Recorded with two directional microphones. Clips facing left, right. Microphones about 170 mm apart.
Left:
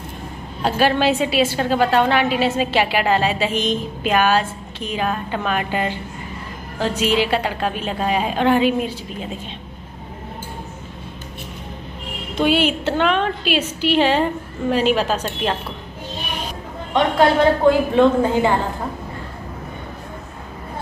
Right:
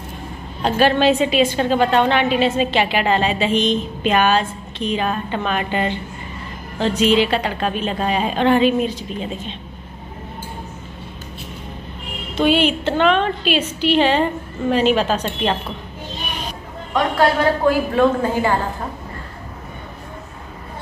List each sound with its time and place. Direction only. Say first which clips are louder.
0.6 s a woman's voice: right 2 dB; 10° left (ahead or behind)
12.4 s a woman's voice: right 1 dB; 10° left (ahead or behind)
16.9 s a woman's voice: left 2 dB; 20° left (ahead or behind)